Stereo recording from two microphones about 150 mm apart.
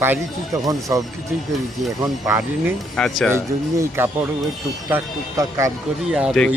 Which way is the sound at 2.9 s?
5° left (ahead or behind).